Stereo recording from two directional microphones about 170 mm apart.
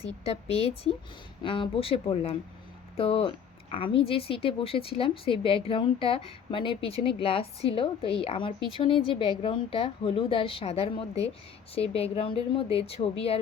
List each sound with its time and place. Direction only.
0.0 s speech: 35° left (ahead or behind)